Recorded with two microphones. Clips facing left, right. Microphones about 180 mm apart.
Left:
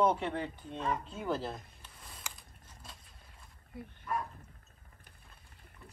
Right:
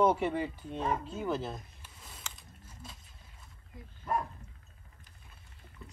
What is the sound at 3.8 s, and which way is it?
Bow-wow, 60° left (ahead or behind).